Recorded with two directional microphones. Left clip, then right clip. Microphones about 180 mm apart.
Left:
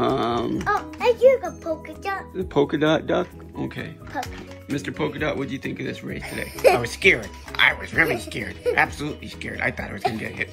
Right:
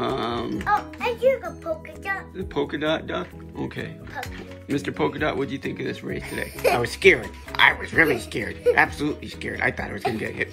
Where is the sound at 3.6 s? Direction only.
Centre (ahead or behind).